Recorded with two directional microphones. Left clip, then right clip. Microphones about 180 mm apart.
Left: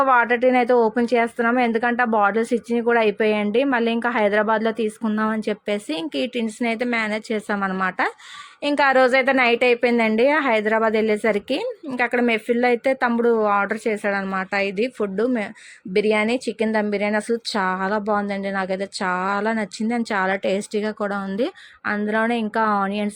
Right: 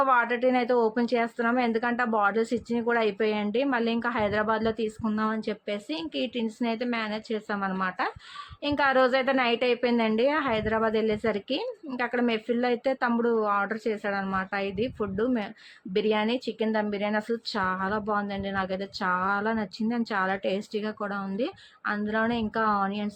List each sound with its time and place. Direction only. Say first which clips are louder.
0.0 s speech: left 6 dB; 35° left (ahead or behind)
6.4 s speech: left 6 dB; 25° left (ahead or behind)